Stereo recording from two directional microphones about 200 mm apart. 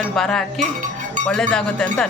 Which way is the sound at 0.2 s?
Centre (ahead or behind).